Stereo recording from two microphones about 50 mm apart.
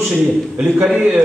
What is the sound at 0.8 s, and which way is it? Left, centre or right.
Speech, centre.